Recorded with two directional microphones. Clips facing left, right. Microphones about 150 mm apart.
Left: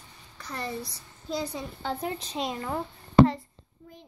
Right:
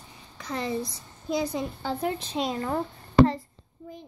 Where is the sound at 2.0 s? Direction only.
Centre (ahead or behind).